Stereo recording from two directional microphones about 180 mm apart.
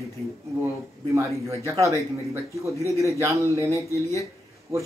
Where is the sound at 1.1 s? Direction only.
15° right (ahead or behind).